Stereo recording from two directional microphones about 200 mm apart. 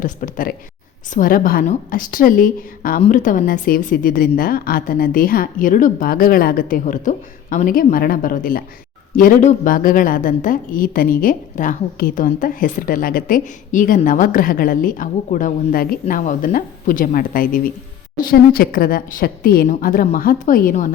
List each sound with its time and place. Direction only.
0.0 s a woman's voice: 45° left (ahead or behind)